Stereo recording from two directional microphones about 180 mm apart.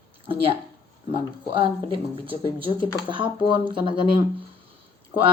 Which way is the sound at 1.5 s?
30° right (ahead or behind).